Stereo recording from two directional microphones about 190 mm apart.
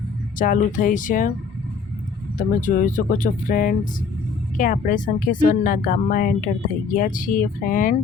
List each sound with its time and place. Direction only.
0.3 s speech: 45° left (ahead or behind)
2.6 s speech: 40° left (ahead or behind)